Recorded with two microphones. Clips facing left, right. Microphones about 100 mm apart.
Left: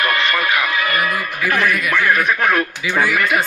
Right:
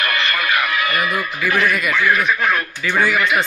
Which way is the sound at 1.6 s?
Centre (ahead or behind).